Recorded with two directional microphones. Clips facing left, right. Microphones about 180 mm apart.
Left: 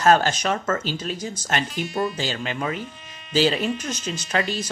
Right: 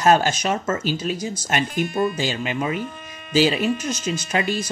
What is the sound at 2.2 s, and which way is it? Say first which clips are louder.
Speech: right 3 dB; 10° right (ahead or behind).